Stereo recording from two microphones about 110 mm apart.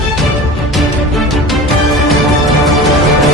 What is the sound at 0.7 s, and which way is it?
Music, centre (ahead or behind).